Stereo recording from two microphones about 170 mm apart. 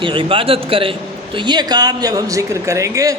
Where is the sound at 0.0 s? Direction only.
30° right (ahead or behind).